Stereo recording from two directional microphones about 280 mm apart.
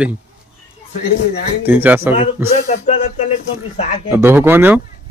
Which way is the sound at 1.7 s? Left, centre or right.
Centre.